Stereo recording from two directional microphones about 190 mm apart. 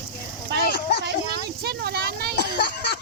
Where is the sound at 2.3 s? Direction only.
60° left (ahead or behind).